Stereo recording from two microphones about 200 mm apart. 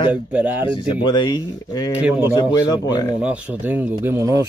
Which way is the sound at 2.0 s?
5° right (ahead or behind).